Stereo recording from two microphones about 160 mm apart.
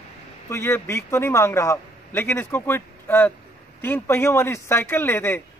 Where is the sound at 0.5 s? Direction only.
15° left (ahead or behind).